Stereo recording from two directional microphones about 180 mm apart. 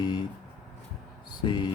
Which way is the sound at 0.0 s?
25° left (ahead or behind).